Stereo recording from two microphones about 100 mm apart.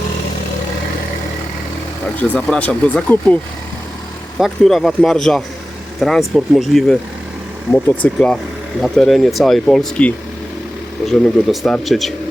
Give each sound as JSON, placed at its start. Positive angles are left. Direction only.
{"t": 2.1, "sound": "speech", "side_deg": 15}
{"t": 4.4, "sound": "speech", "side_deg": 0}
{"t": 7.7, "sound": "speech", "side_deg": 25}
{"t": 8.8, "sound": "speech", "side_deg": 0}
{"t": 11.0, "sound": "speech", "side_deg": 5}